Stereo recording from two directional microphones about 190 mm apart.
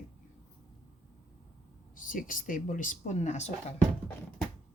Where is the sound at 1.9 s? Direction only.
45° left (ahead or behind).